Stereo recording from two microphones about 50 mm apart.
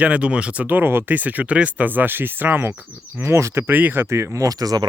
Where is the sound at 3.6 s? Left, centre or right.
Right.